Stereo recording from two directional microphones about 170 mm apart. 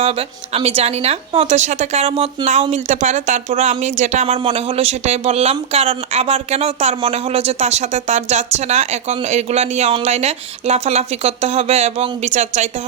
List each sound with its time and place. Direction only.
0.0 s speech: 35° right (ahead or behind)